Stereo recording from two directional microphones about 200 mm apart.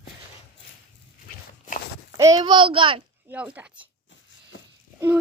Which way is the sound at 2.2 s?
20° right (ahead or behind).